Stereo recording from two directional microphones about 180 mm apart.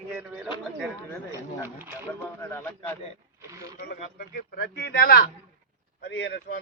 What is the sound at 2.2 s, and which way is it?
Speech, 10° left (ahead or behind).